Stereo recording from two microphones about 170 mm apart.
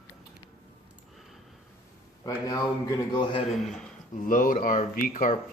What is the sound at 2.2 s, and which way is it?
Speech, 20° left (ahead or behind).